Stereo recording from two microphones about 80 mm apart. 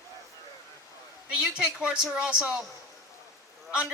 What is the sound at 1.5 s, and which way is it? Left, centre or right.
Speech, centre.